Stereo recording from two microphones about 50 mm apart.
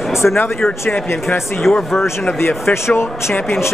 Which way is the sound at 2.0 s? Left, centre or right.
Left.